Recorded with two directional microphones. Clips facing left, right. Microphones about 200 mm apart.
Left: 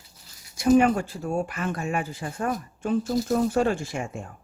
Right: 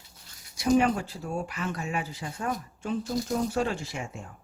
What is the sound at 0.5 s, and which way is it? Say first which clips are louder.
Speech: left 4 dB; 50° left (ahead or behind).